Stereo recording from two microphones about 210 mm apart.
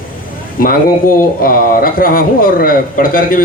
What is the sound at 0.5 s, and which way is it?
A man's voice, 40° left (ahead or behind).